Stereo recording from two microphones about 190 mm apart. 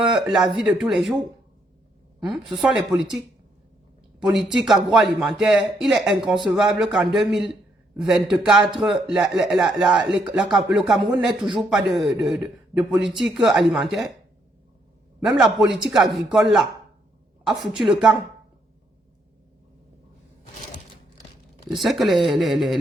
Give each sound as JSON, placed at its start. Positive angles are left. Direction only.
{"t": 0.0, "sound": "a man's voice", "side_deg": 0}
{"t": 2.2, "sound": "a man's voice", "side_deg": -5}
{"t": 4.2, "sound": "a man's voice", "side_deg": 0}
{"t": 15.2, "sound": "a man's voice", "side_deg": 0}
{"t": 21.7, "sound": "a man's voice", "side_deg": 0}